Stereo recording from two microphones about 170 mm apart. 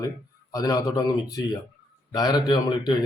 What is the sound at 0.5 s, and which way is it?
A man's voice, 20° left (ahead or behind).